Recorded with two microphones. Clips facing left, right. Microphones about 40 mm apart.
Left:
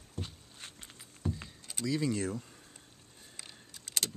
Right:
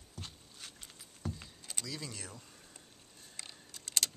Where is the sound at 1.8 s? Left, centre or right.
Centre.